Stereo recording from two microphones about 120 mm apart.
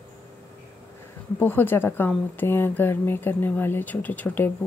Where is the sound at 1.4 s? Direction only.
15° left (ahead or behind).